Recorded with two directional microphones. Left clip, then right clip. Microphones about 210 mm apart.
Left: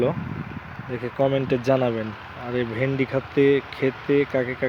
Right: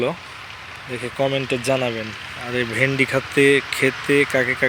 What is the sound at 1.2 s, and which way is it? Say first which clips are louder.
Speech: even; 20° left (ahead or behind).